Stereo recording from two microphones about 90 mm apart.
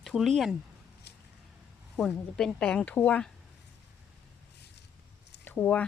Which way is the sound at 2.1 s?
10° left (ahead or behind).